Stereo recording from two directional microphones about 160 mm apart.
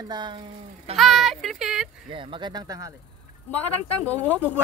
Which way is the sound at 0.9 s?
Centre (ahead or behind).